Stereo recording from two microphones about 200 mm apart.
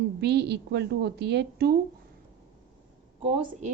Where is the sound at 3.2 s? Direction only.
30° right (ahead or behind).